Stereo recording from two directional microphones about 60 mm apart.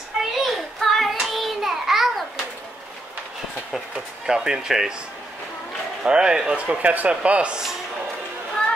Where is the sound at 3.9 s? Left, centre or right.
Centre.